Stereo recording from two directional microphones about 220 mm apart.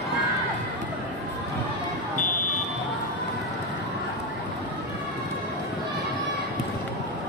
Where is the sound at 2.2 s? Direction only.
35° left (ahead or behind).